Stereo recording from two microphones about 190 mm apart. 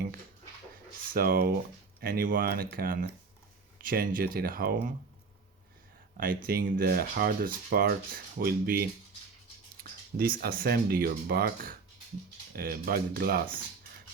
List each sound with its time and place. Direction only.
1.1 s speech: 50° right (ahead or behind)
6.1 s speech: 50° right (ahead or behind)
10.2 s speech: 50° right (ahead or behind)